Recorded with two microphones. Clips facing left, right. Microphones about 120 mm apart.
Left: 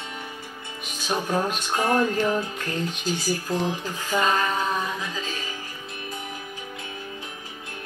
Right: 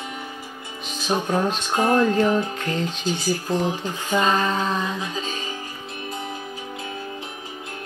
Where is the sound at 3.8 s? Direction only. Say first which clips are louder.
Right 3 dB; 30° right (ahead or behind).